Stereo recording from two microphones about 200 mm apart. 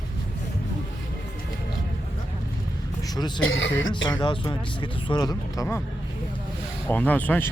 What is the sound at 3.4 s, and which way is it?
Speech, 75° left (ahead or behind).